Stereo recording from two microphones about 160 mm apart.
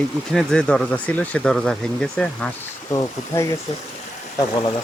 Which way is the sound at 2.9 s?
20° left (ahead or behind).